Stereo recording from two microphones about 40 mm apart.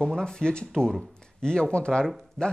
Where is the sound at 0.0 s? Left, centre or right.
Centre.